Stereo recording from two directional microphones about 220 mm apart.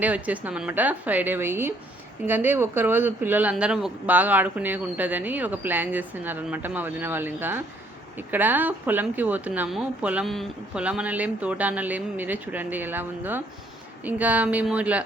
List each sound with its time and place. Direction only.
0.0 s speech: 5° right (ahead or behind)